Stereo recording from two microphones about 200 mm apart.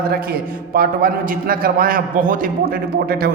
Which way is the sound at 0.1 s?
50° right (ahead or behind).